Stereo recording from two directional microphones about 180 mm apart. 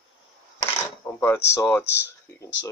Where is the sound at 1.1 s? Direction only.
15° left (ahead or behind).